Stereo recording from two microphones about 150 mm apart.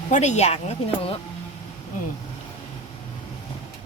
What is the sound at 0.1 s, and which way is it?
Speech, 50° left (ahead or behind).